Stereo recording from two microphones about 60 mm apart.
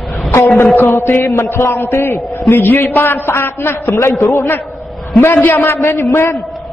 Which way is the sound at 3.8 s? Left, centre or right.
Left.